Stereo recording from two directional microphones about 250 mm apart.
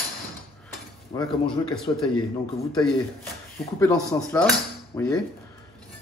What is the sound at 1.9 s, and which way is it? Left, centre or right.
Speech, left.